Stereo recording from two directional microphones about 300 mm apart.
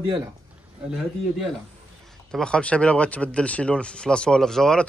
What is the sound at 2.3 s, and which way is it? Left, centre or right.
Speech, centre.